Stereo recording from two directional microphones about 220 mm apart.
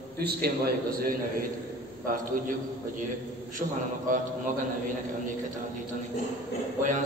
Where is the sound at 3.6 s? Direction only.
30° right (ahead or behind).